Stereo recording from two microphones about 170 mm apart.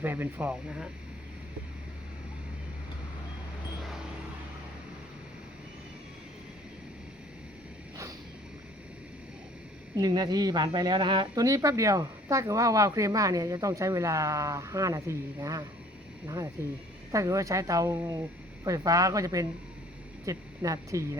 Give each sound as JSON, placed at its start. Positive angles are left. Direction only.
{"t": 0.0, "sound": "speech", "side_deg": -15}
{"t": 9.9, "sound": "speech", "side_deg": -25}